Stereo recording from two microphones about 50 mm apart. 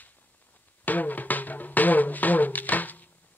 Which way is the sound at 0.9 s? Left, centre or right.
Left.